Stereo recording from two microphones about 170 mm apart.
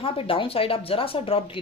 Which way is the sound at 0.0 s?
30° left (ahead or behind).